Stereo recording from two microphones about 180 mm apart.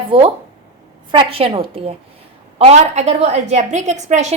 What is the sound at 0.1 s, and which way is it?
A woman's voice, 30° right (ahead or behind).